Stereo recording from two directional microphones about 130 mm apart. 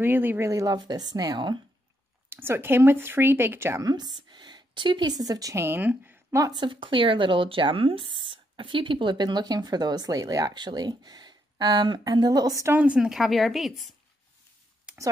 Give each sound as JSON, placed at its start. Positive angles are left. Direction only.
{"t": 0.0, "sound": "speech", "side_deg": -15}
{"t": 2.2, "sound": "speech", "side_deg": -20}
{"t": 3.9, "sound": "speech", "side_deg": -35}
{"t": 6.5, "sound": "speech", "side_deg": -40}
{"t": 12.7, "sound": "a woman's voice", "side_deg": -10}
{"t": 14.9, "sound": "a sound", "side_deg": -10}